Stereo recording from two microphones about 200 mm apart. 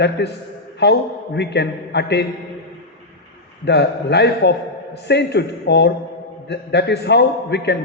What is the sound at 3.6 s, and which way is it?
A man's voice, 60° left (ahead or behind).